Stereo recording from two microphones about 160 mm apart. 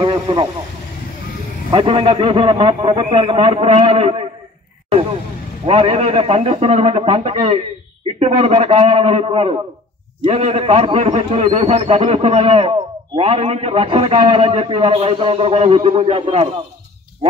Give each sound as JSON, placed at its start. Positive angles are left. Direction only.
{"t": 0.0, "sound": "vehicle", "side_deg": -25}
{"t": 1.7, "sound": "a man's voice", "side_deg": -30}
{"t": 5.7, "sound": "a man's voice", "side_deg": -40}